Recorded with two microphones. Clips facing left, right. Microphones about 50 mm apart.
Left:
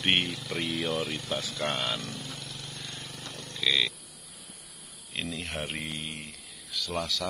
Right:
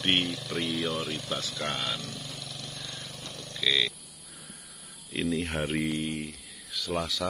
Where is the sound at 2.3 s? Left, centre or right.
Left.